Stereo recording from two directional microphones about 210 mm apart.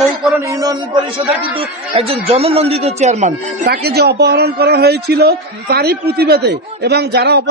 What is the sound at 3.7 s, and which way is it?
A man's voice, 50° right (ahead or behind).